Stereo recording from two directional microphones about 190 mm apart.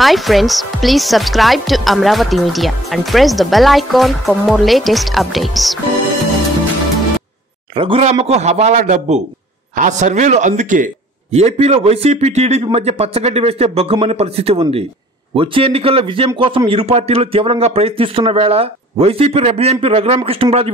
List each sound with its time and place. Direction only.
0.0 s speech: centre (ahead or behind)
7.7 s a man's voice: 30° right (ahead or behind)